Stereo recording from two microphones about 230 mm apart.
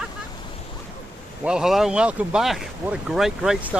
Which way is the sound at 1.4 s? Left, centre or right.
Centre.